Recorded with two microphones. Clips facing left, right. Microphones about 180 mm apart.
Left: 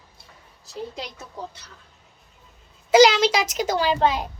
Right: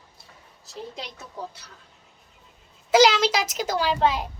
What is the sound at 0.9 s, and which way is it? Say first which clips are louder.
Speech: left 2 dB; centre (ahead or behind).